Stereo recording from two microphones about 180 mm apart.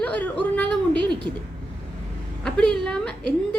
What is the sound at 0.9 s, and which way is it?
Speech, 25° right (ahead or behind).